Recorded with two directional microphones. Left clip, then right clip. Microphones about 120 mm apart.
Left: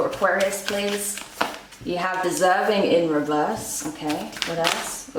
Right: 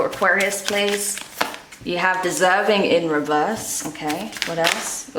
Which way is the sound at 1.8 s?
45° right (ahead or behind).